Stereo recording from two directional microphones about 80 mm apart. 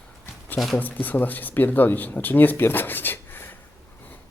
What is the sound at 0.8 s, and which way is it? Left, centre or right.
Speech, left.